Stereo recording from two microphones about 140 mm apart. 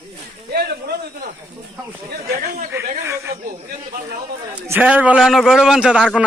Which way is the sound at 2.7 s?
20° right (ahead or behind).